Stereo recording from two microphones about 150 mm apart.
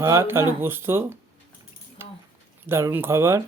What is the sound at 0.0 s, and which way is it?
Speech, 15° right (ahead or behind).